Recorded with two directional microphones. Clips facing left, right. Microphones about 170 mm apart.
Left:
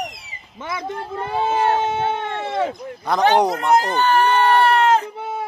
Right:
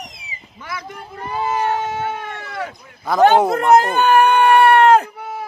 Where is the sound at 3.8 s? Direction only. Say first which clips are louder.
Right 4 dB; 55° right (ahead or behind).